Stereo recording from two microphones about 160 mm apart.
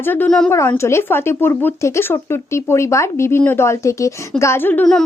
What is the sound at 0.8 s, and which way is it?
Speech, 15° left (ahead or behind).